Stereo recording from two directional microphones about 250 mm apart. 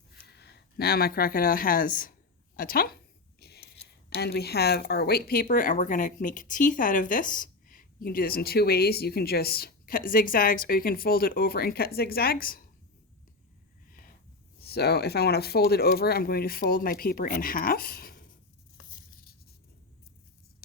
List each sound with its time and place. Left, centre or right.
0.1 s speech: left
3.4 s a sound: left
4.1 s speech: left
14.6 s speech: left
18.9 s tearing: left